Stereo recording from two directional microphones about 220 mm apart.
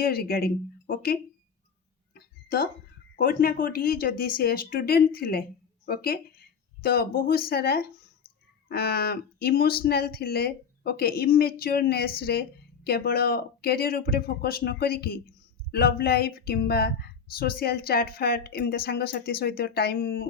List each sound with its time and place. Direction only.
0.0 s speech: 45° left (ahead or behind)
2.1 s a sound: 45° left (ahead or behind)
3.2 s speech: 40° left (ahead or behind)